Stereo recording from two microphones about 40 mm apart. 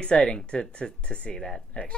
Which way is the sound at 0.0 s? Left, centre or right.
Left.